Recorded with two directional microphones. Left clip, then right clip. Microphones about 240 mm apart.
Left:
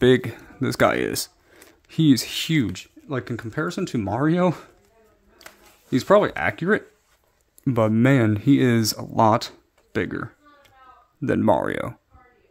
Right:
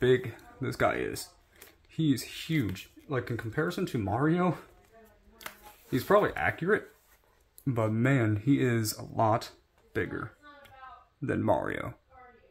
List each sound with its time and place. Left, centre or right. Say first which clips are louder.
0.0 s speech: left 8 dB; left
5.9 s speech: left 7 dB; left